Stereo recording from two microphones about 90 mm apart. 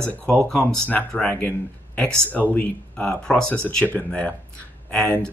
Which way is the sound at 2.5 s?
15° left (ahead or behind).